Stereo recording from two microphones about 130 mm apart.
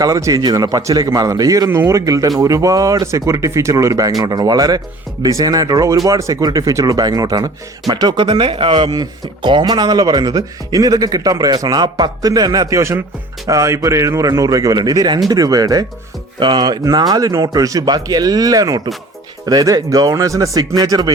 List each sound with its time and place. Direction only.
0.0 s speech: 25° right (ahead or behind)